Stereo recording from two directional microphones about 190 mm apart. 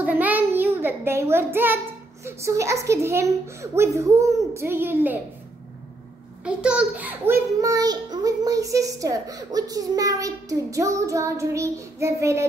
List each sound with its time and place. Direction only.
0.0 s child singing: 10° right (ahead or behind)
2.2 s a child's voice: 15° right (ahead or behind)
6.4 s a child's voice: 5° right (ahead or behind)